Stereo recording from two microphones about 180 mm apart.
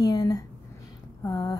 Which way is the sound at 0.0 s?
20° left (ahead or behind).